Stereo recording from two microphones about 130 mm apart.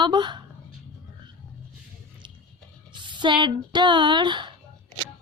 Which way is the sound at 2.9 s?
35° right (ahead or behind).